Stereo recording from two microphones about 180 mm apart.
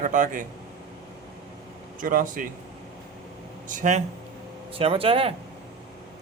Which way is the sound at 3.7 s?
45° right (ahead or behind).